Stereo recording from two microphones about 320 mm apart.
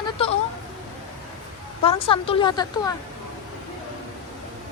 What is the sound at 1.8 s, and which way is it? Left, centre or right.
A woman's voice, centre.